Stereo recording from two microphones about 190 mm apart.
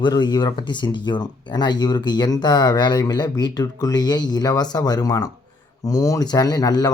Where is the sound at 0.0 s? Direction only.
20° left (ahead or behind).